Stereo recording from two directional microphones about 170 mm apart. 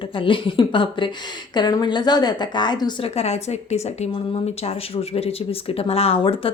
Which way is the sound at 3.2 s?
40° left (ahead or behind).